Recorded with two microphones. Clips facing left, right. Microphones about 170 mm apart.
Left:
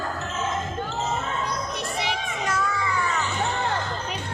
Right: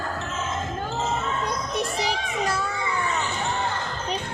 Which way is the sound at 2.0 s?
30° right (ahead or behind).